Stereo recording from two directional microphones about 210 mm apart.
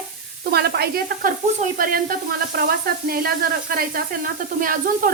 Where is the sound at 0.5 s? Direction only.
50° right (ahead or behind).